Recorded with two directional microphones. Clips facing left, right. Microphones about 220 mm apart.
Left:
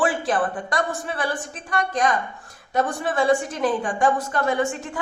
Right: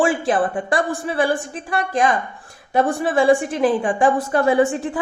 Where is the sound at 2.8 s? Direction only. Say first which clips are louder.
Right 5 dB; 30° right (ahead or behind).